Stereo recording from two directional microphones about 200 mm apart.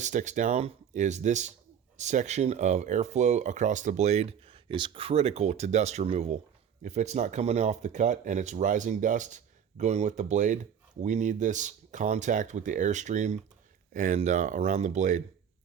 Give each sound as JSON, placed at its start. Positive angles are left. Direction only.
{"t": 0.0, "sound": "speech", "side_deg": -40}